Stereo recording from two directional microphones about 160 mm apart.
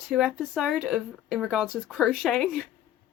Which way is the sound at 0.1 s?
Centre (ahead or behind).